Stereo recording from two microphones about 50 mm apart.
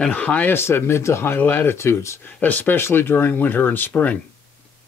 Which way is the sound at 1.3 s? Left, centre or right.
Left.